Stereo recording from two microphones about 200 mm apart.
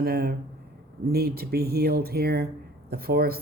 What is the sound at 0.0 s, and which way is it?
Speech, 50° right (ahead or behind).